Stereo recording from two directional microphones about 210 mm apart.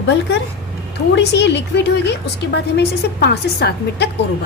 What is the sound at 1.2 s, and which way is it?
A woman's voice, 55° left (ahead or behind).